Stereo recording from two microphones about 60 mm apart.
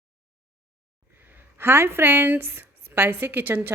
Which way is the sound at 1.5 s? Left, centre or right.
Right.